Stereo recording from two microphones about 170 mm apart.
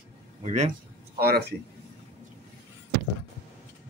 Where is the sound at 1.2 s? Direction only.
65° right (ahead or behind).